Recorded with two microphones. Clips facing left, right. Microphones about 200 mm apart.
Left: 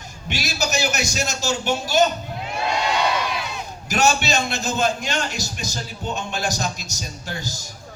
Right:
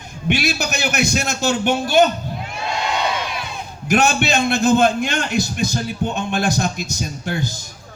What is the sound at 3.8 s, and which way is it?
A man's voice, 55° right (ahead or behind).